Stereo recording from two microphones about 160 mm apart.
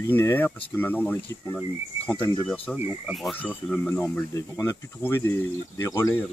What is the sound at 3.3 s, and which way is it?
Speech, 10° left (ahead or behind).